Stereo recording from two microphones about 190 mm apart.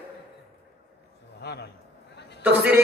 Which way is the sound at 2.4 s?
10° right (ahead or behind).